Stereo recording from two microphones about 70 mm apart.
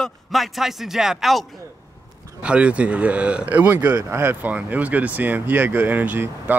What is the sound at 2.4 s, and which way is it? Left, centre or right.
Speech, centre.